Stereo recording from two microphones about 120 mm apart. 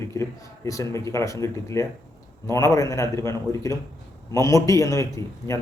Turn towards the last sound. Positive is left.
turn(degrees=25)  # may be behind; listen again after turning